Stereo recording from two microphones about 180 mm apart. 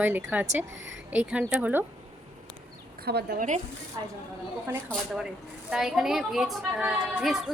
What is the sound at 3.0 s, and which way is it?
Speech, 60° right (ahead or behind).